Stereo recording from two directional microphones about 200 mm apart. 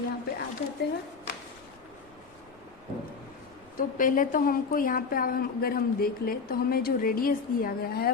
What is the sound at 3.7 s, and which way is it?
A woman's voice, 40° left (ahead or behind).